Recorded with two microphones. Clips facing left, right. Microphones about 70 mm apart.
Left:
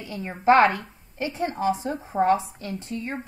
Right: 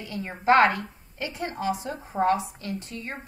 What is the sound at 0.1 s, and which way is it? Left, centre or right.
A woman's voice, left.